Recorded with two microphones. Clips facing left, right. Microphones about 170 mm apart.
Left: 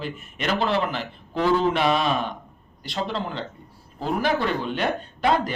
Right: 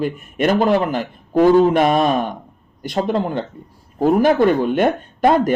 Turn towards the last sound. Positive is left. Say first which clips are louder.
# right 7 dB
turn(degrees=-50)  # may be behind; listen again after turning